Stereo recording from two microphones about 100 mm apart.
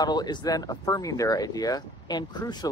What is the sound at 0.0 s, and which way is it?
Speech, 45° left (ahead or behind).